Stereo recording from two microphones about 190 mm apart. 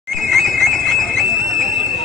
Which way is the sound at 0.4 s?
Centre (ahead or behind).